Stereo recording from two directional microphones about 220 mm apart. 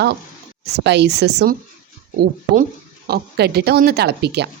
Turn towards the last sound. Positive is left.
turn(degrees=-50)  # may be behind; listen again after turning